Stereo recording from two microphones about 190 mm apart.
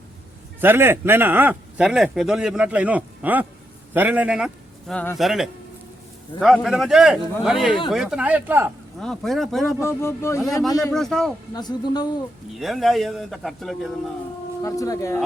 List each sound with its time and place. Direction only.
0.6 s a man's voice: 10° right (ahead or behind)
9.0 s a man's voice: centre (ahead or behind)
9.8 s speech: 15° left (ahead or behind)
10.9 s a man's voice: centre (ahead or behind)
11.5 s speech: 20° left (ahead or behind)
12.5 s a man's voice: centre (ahead or behind)
14.6 s speech: 15° left (ahead or behind)